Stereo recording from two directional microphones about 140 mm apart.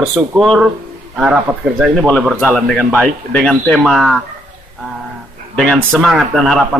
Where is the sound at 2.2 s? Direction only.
Centre (ahead or behind).